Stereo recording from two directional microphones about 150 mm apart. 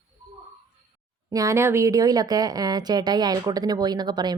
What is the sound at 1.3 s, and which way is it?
Speech, 20° right (ahead or behind).